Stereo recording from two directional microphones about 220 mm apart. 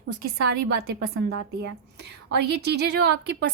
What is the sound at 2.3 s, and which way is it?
A woman's voice, 50° right (ahead or behind).